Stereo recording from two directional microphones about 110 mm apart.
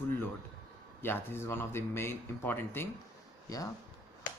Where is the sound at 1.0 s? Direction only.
20° left (ahead or behind).